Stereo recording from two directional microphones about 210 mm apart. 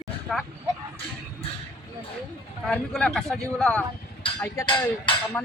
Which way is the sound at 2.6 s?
5° left (ahead or behind).